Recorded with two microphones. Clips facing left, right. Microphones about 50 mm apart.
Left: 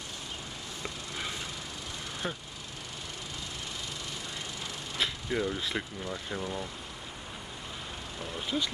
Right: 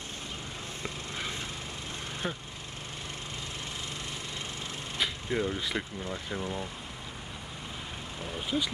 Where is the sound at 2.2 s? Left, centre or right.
Centre.